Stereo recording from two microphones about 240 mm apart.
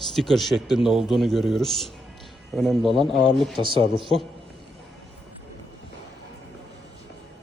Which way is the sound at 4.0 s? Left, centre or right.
Centre.